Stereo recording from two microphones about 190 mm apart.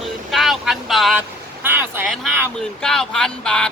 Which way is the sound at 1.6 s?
10° right (ahead or behind).